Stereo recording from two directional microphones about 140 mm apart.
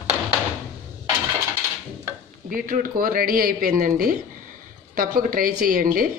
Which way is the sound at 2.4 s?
90° right.